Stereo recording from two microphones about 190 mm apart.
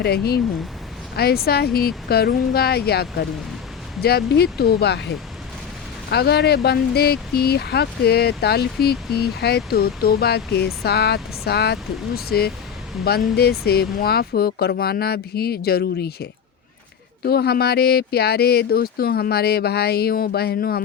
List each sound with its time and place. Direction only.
0.0 s speech: 55° left (ahead or behind)